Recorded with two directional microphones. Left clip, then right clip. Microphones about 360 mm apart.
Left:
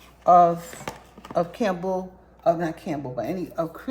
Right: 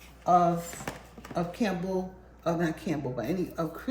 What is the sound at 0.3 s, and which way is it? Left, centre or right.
A woman's voice, left.